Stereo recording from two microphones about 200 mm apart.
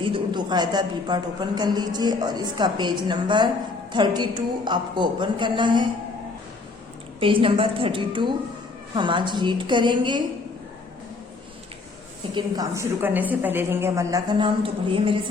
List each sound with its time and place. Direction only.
0.0 s a woman's voice: 25° right (ahead or behind)
7.2 s a woman's voice: 25° right (ahead or behind)
12.3 s a woman's voice: 20° right (ahead or behind)